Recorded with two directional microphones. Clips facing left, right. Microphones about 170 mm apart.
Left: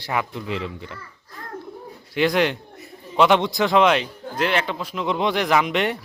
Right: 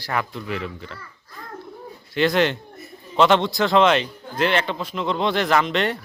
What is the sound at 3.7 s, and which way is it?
Speech, 5° left (ahead or behind).